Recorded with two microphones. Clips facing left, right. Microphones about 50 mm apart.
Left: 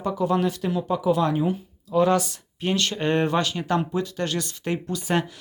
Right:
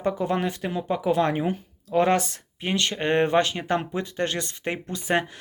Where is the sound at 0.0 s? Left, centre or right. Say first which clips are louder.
Left 2 dB; right.